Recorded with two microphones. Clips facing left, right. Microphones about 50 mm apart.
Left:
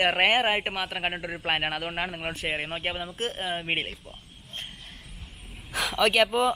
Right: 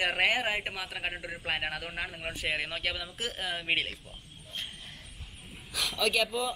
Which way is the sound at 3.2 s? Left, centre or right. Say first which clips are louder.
Left 5 dB; left.